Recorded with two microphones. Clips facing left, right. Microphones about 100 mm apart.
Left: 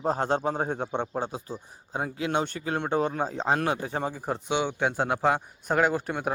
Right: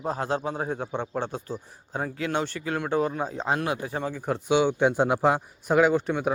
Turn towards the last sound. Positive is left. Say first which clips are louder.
# right 4 dB
turn(degrees=5)  # may be behind; listen again after turning